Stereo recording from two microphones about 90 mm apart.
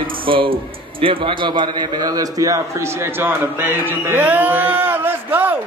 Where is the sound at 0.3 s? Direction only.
70° right (ahead or behind); by 5.6 s 20° right (ahead or behind).